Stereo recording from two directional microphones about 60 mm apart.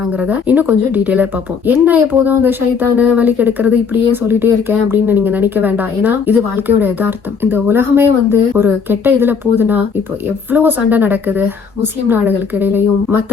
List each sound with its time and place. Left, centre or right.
0.2 s speech: right